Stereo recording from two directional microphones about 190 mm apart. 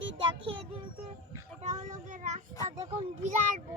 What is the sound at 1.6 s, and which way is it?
Speech, 40° right (ahead or behind).